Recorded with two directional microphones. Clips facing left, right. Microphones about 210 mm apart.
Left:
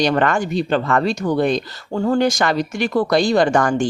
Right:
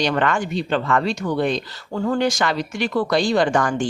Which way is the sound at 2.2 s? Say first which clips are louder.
Left 3 dB; 45° left (ahead or behind).